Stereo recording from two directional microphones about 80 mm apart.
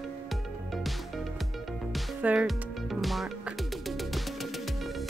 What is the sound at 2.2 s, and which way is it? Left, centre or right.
Speech, centre.